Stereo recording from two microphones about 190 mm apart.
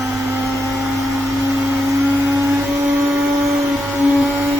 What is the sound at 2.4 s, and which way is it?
Vacuum cleaner, 15° right (ahead or behind).